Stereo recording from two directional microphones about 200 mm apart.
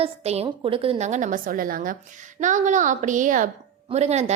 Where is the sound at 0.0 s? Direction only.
30° right (ahead or behind).